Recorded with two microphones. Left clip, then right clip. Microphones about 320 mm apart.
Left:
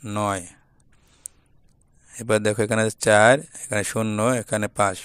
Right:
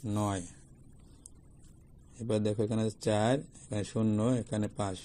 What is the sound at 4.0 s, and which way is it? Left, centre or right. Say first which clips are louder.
Speech: left 7 dB; left.